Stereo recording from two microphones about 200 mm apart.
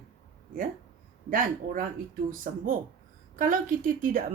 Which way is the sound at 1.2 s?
45° right (ahead or behind).